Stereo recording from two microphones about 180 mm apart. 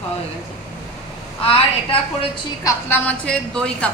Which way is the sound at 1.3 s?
30° left (ahead or behind).